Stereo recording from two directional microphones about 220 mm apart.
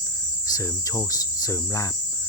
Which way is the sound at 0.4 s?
15° left (ahead or behind).